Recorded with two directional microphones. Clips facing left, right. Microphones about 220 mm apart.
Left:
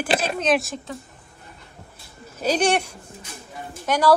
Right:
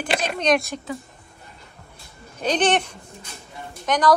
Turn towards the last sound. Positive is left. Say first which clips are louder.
# even
turn(degrees=10)  # may be behind; listen again after turning